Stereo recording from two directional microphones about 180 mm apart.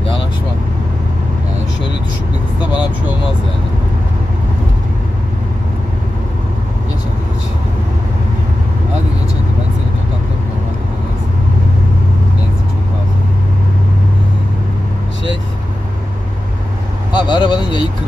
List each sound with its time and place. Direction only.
17.1 s vehicle: 25° left (ahead or behind)